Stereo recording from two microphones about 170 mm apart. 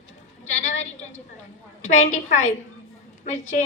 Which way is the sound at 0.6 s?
45° left (ahead or behind).